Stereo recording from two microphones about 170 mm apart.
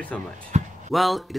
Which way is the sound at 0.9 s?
Centre (ahead or behind).